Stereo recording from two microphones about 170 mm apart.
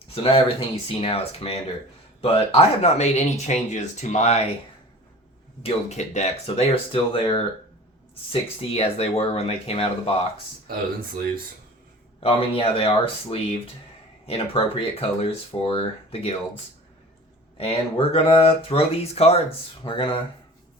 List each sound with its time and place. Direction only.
0.1 s speech: 35° left (ahead or behind)
5.6 s speech: 40° left (ahead or behind)
12.2 s speech: 35° left (ahead or behind)
17.6 s speech: 35° left (ahead or behind)